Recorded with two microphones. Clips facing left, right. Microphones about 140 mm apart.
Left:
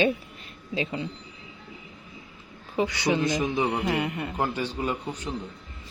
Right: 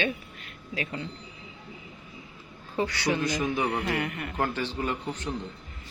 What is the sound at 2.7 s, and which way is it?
A man's voice, 15° left (ahead or behind).